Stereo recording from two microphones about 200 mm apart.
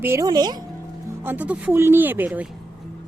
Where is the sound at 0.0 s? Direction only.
15° right (ahead or behind).